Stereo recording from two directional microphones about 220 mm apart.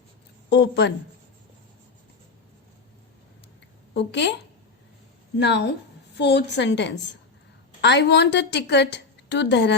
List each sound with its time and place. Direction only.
0.5 s a woman's voice: 50° left (ahead or behind)
3.9 s a woman's voice: 50° left (ahead or behind)
5.4 s a woman's voice: 50° left (ahead or behind)